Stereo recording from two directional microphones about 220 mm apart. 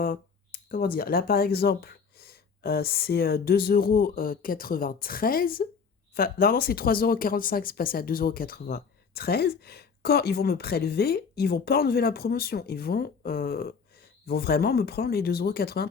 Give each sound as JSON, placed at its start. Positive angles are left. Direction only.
{"t": 0.0, "sound": "speech", "side_deg": 40}